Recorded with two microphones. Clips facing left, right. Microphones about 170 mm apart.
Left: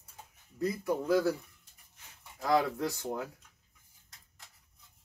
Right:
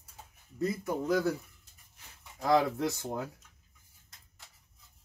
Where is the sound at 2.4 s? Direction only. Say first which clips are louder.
Right 2 dB; 20° right (ahead or behind).